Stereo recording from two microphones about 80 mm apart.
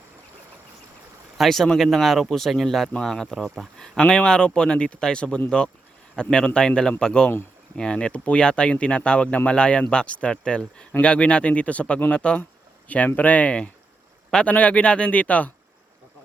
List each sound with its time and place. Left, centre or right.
1.4 s speech: centre